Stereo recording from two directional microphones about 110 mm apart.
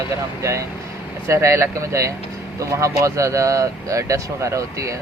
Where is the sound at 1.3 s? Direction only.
25° right (ahead or behind).